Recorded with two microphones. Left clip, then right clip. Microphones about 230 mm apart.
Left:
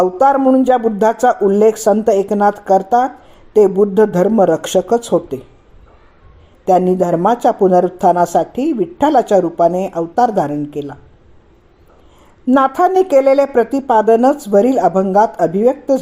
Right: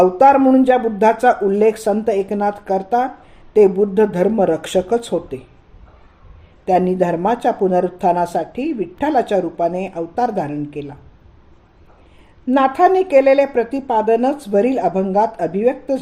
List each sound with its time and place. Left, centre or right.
0.0 s speech: left
6.7 s speech: left
12.5 s speech: left